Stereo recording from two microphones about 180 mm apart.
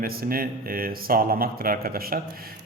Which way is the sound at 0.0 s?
55° right (ahead or behind).